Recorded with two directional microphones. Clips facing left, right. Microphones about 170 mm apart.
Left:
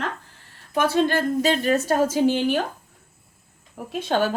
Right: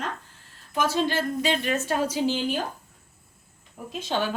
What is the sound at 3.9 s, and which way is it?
Speech, 60° left (ahead or behind).